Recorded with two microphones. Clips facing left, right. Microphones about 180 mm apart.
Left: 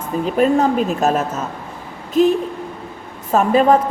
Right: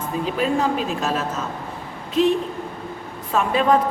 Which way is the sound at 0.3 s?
50° left (ahead or behind).